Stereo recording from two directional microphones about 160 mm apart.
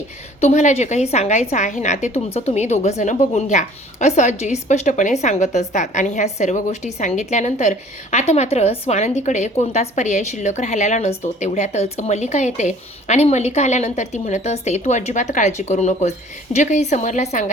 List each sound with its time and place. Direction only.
0.3 s a woman's voice: 45° left (ahead or behind)